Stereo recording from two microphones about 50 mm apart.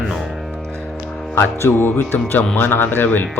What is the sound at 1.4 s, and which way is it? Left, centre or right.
Speech, left.